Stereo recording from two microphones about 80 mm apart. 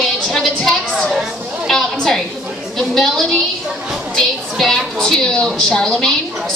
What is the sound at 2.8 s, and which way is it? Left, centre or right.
A woman's voice, centre.